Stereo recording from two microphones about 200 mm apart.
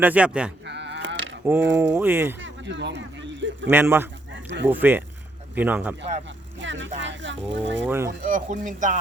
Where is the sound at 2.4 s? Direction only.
60° right (ahead or behind).